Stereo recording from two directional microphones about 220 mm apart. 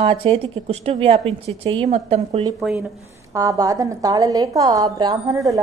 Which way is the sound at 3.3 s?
15° right (ahead or behind).